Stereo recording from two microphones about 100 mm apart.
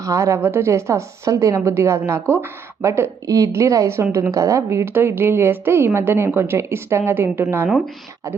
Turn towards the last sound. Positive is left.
turn(degrees=-25)  # may be behind; listen again after turning